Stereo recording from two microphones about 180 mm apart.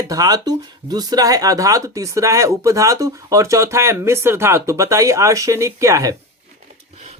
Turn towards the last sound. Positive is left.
turn(degrees=-15)  # may be behind; listen again after turning